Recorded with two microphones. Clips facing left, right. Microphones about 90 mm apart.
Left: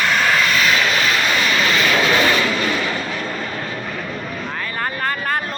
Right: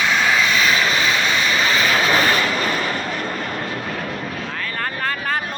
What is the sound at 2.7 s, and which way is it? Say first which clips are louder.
Vehicle: left 1 dB; 45° right (ahead or behind).